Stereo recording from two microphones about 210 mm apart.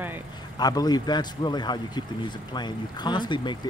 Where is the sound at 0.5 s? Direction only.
20° left (ahead or behind).